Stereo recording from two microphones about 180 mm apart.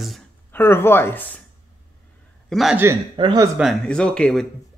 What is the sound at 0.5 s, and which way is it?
Speech, 10° left (ahead or behind).